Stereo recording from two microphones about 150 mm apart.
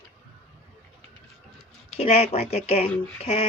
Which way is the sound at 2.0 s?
40° left (ahead or behind).